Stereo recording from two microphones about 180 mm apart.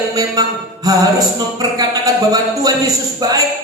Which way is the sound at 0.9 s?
20° right (ahead or behind).